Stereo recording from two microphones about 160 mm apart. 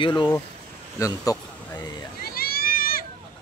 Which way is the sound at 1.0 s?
20° left (ahead or behind).